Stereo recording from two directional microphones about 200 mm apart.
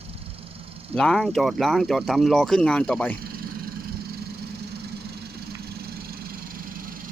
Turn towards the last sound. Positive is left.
turn(degrees=-45)  # may be behind; listen again after turning